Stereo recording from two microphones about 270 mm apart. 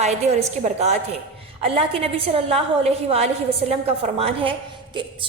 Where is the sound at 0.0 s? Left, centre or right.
Right.